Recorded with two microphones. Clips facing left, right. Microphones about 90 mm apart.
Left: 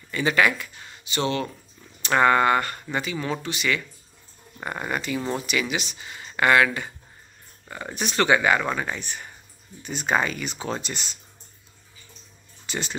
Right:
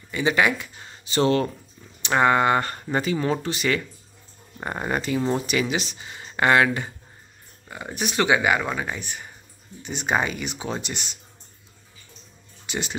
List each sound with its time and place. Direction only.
0.1 s speech: 20° right (ahead or behind); by 1.5 s 35° right (ahead or behind)
2.0 s speech: 20° right (ahead or behind)
7.6 s speech: 10° right (ahead or behind)
12.6 s a sound: 15° right (ahead or behind)